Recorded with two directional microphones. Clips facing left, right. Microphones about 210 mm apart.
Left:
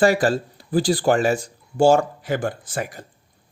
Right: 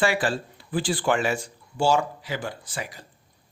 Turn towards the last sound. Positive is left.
turn(degrees=50)  # may be behind; listen again after turning